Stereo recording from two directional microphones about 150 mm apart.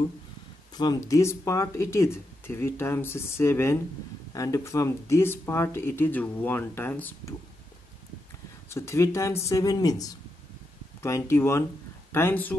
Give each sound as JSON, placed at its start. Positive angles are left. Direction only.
{"t": 0.7, "sound": "speech", "side_deg": 25}
{"t": 8.6, "sound": "speech", "side_deg": 20}